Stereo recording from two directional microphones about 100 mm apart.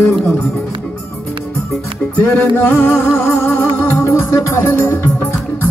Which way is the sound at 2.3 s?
15° left (ahead or behind).